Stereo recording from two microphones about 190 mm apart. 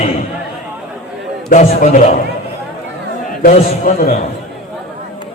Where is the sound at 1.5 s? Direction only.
45° left (ahead or behind).